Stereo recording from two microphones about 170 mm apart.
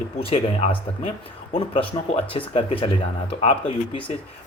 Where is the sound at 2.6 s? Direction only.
35° left (ahead or behind).